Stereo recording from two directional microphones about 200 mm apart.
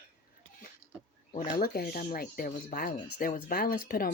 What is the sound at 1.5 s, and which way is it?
Speech, 45° left (ahead or behind).